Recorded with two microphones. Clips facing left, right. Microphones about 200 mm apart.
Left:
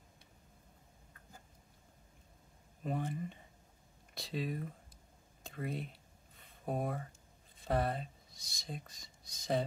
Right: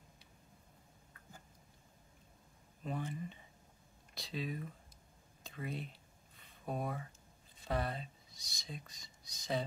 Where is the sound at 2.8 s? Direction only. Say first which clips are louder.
Left 3 dB; 50° left (ahead or behind).